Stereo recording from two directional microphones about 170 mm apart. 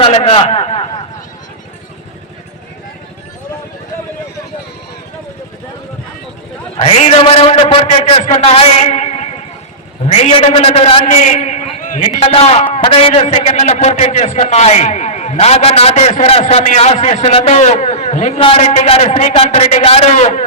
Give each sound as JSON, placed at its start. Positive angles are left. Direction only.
{"t": 0.0, "sound": "a man's voice", "side_deg": 35}
{"t": 6.8, "sound": "a man's voice", "side_deg": 35}
{"t": 12.2, "sound": "a man's voice", "side_deg": 35}